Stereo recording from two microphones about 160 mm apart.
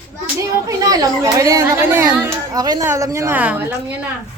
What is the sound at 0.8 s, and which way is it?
A woman's voice, 20° right (ahead or behind).